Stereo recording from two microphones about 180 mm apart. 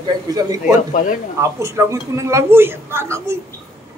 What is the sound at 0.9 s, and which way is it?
Speech, 50° left (ahead or behind).